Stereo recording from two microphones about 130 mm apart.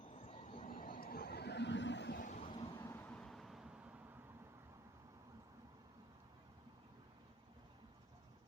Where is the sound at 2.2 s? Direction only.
90° left.